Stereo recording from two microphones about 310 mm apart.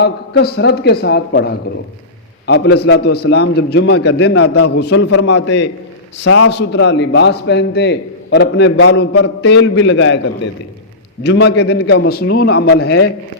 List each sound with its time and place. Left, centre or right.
0.0 s a man's voice: left
11.2 s a man's voice: left